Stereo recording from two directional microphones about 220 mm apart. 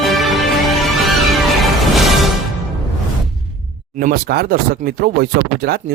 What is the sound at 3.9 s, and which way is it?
Speech, 40° right (ahead or behind).